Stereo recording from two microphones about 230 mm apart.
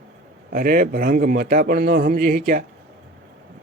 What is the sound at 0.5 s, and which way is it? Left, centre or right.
Speech, right.